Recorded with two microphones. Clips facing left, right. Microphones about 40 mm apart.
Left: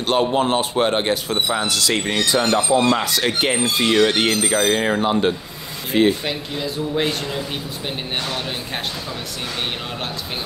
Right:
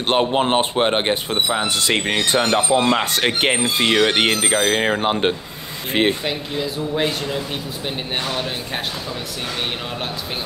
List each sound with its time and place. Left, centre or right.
0.0 s speech: right
3.6 s speech: right
6.2 s speech: centre